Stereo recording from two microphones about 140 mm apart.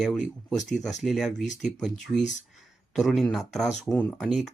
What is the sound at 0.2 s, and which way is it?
Speech, 60° left (ahead or behind).